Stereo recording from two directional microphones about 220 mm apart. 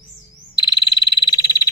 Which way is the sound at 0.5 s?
20° left (ahead or behind).